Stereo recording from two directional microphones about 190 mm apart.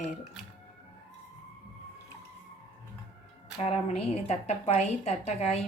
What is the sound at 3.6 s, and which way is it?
A woman's voice, 30° left (ahead or behind).